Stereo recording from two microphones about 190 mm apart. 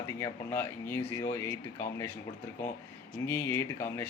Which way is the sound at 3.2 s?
10° left (ahead or behind).